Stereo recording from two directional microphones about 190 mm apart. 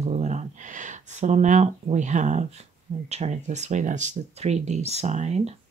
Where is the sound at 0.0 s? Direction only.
35° right (ahead or behind).